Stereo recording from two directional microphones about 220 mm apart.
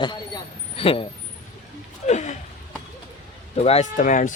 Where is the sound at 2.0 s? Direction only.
30° left (ahead or behind).